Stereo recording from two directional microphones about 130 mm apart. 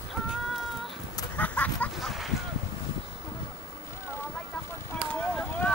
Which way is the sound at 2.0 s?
Centre (ahead or behind).